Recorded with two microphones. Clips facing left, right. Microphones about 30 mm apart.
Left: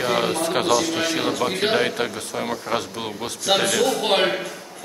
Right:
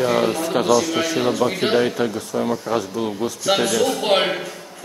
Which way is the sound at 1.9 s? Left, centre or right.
Left.